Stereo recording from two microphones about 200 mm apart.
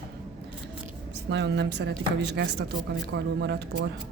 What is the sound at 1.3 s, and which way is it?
Speech, 60° right (ahead or behind).